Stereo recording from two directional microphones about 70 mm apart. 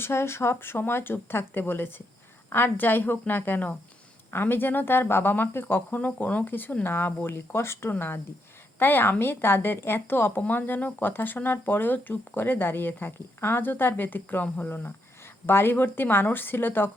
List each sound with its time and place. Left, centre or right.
0.0 s speech: left